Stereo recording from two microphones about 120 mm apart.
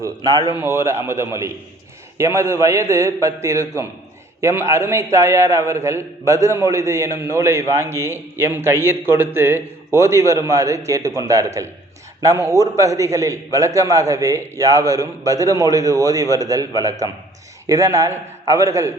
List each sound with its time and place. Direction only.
0.5 s a man's voice: 20° right (ahead or behind)